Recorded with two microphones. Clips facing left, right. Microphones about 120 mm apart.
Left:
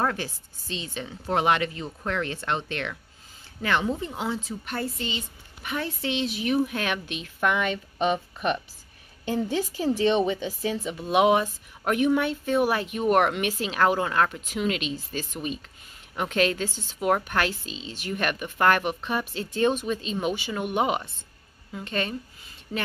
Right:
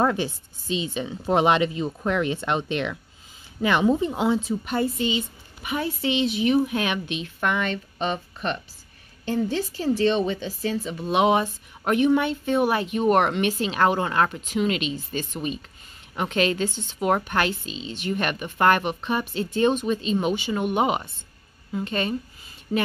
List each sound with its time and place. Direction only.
0.0 s a woman's voice: 15° right (ahead or behind)